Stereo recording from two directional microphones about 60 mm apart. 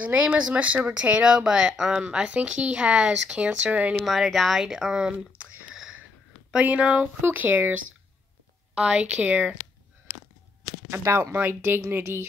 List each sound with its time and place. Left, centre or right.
0.0 s speech: right
4.0 s speech: centre
5.7 s wheeze: centre
6.5 s speech: centre
8.7 s speech: centre
11.3 s speech: right